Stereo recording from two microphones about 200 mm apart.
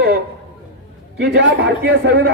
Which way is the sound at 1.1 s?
60° right (ahead or behind).